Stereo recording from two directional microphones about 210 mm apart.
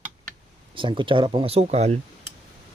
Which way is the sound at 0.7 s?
25° right (ahead or behind).